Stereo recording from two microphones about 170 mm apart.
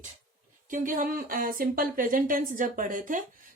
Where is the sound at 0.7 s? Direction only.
50° right (ahead or behind).